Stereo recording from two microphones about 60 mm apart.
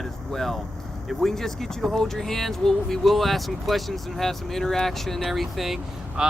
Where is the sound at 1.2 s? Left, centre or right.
Centre.